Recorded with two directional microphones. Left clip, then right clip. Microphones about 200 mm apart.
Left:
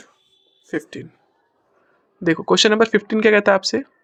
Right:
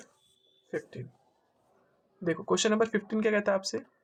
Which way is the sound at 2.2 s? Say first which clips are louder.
Left 13 dB; 40° left (ahead or behind).